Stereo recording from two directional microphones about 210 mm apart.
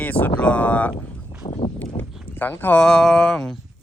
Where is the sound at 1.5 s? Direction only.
30° left (ahead or behind).